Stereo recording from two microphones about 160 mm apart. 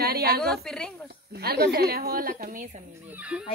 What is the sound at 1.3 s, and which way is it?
A woman's voice, 85° right.